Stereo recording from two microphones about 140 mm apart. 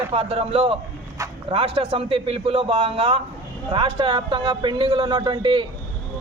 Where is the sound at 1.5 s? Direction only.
40° right (ahead or behind).